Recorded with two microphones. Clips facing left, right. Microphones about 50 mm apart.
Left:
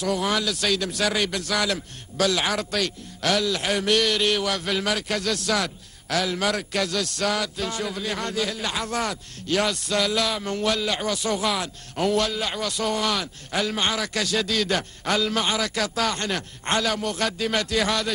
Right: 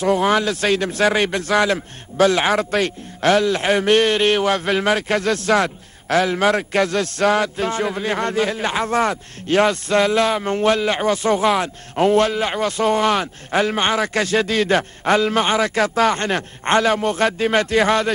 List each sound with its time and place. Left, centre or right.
0.0 s a man's voice: right